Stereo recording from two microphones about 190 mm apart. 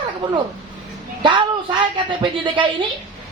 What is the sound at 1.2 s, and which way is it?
Speech, 25° right (ahead or behind).